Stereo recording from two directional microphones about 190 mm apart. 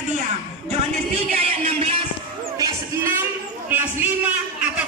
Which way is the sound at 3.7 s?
10° right (ahead or behind).